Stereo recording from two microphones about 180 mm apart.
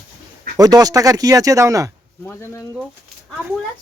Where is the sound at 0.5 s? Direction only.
20° right (ahead or behind).